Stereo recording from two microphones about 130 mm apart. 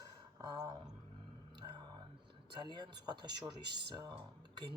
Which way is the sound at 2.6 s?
35° right (ahead or behind).